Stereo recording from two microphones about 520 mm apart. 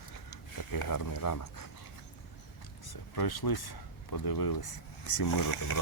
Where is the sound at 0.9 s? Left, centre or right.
Left.